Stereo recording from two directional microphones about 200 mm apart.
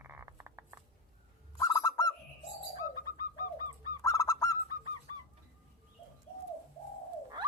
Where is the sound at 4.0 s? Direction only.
15° left (ahead or behind).